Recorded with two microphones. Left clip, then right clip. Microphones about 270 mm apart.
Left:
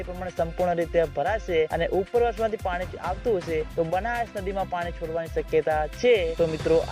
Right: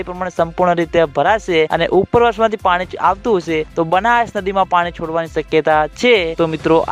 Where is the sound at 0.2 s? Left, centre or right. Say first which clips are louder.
Right 10 dB; right.